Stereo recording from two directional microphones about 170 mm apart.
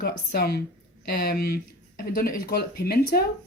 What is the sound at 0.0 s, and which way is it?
Speech, 65° left (ahead or behind).